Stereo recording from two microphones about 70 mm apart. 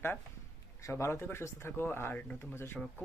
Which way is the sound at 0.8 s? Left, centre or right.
Left.